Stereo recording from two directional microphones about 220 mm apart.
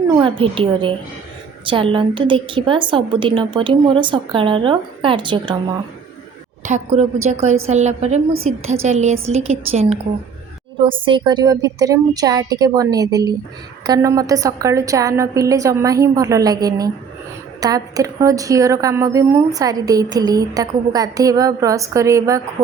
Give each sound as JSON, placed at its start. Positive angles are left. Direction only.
{"t": 0.1, "sound": "a woman's voice", "side_deg": -20}
{"t": 6.7, "sound": "a woman's voice", "side_deg": -35}